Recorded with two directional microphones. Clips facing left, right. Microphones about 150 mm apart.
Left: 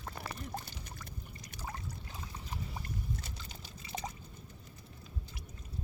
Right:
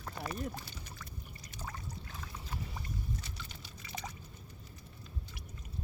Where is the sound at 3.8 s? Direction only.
25° left (ahead or behind).